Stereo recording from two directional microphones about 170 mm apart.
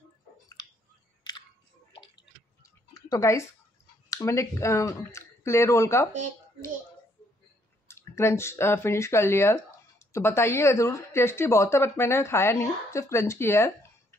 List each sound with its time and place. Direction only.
1.3 s biting: 25° left (ahead or behind)
1.9 s drip: 30° left (ahead or behind)
2.9 s a sound: 20° left (ahead or behind)
4.1 s speech: 15° left (ahead or behind)
7.9 s speech: 15° left (ahead or behind)